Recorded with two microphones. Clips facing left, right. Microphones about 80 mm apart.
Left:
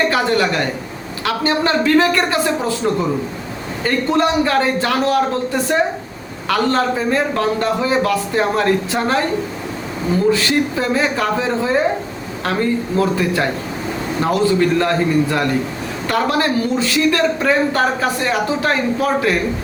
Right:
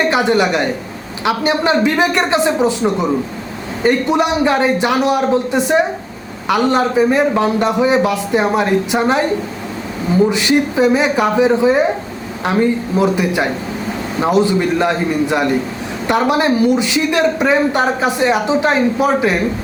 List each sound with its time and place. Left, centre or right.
0.1 s a man's voice: centre
10.2 s a man's voice: centre